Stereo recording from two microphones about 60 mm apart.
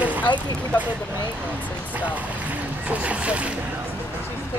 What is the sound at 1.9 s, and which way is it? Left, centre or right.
Speech, right.